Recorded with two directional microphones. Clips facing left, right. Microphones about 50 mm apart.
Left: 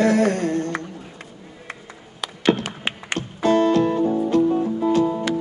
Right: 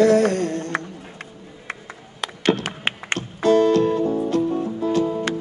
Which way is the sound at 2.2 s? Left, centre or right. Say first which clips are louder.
Left 1 dB; right.